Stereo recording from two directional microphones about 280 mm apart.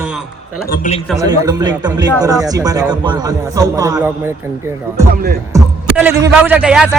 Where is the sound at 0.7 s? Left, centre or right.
Left.